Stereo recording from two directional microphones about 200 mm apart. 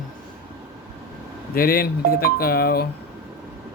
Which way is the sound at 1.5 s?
45° left (ahead or behind).